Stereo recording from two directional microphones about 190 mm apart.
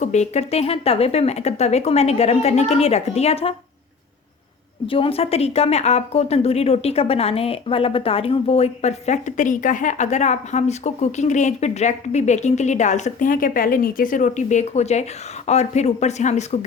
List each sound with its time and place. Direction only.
0.0 s speech: 35° left (ahead or behind)
4.9 s speech: 30° left (ahead or behind)